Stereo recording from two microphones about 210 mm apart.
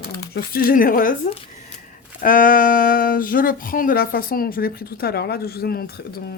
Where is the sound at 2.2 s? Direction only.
40° left (ahead or behind).